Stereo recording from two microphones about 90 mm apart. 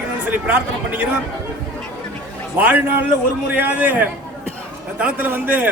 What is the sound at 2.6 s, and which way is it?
A man's voice, 15° right (ahead or behind).